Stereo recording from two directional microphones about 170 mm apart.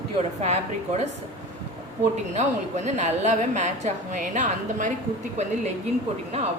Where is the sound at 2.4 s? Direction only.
40° right (ahead or behind).